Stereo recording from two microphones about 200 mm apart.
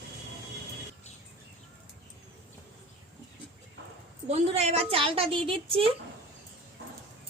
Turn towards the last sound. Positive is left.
turn(degrees=-25)  # may be behind; listen again after turning